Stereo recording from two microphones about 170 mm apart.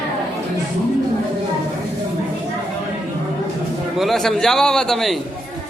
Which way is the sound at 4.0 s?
Centre (ahead or behind).